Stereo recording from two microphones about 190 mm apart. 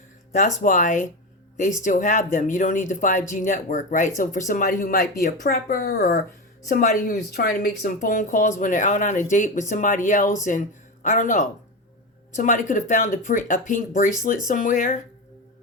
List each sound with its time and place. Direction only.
0.6 s speech: 45° left (ahead or behind)
6.7 s speech: 45° left (ahead or behind)
7.2 s speech: 55° left (ahead or behind)